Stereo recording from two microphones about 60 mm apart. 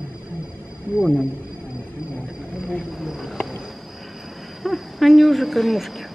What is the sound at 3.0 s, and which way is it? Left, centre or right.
Cricket, centre.